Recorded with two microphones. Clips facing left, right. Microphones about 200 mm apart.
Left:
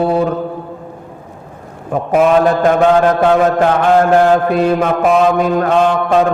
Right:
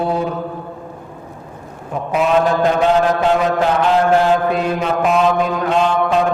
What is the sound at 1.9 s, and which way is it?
Mantra, 50° left (ahead or behind).